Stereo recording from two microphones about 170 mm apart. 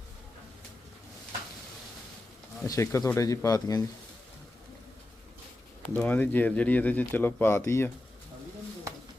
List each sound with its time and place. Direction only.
2.6 s speech: 15° left (ahead or behind)
5.8 s speech: 10° left (ahead or behind)